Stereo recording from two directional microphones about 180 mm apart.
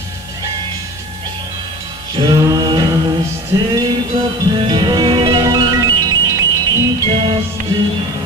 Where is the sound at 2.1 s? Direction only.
20° right (ahead or behind).